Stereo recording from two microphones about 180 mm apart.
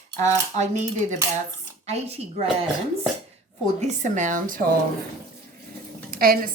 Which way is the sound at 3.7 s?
40° right (ahead or behind).